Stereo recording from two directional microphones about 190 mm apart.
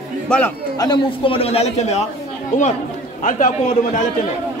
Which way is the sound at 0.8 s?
25° left (ahead or behind).